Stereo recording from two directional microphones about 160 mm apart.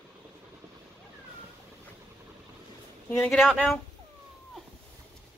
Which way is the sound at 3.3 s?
Centre (ahead or behind).